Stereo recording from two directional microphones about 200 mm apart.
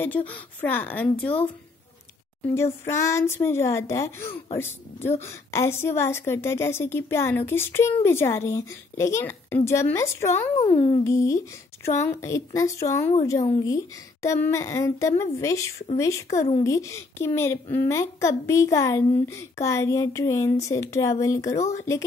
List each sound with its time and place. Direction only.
0.3 s speech: 10° left (ahead or behind)
2.4 s speech: 15° left (ahead or behind)